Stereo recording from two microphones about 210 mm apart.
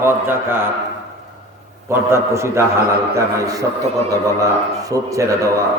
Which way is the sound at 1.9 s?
10° right (ahead or behind).